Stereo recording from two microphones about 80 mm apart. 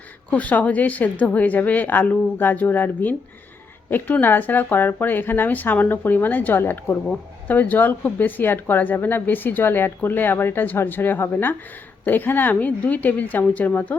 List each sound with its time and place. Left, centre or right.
0.3 s speech: centre